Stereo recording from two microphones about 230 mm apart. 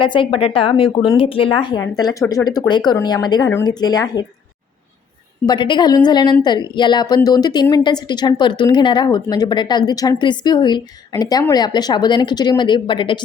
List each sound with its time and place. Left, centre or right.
0.0 s speech: left
5.5 s a woman's voice: centre